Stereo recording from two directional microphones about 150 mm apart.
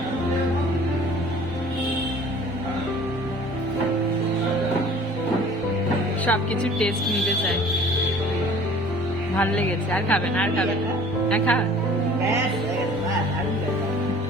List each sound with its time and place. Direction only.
6.2 s a woman's voice: 10° left (ahead or behind)
9.4 s a woman's voice: 10° left (ahead or behind)